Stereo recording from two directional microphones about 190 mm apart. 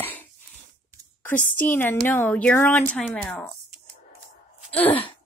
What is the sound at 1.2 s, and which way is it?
Speech, 10° left (ahead or behind).